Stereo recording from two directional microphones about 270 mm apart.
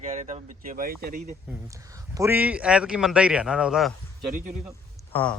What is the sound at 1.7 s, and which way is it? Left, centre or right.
A man's voice, centre.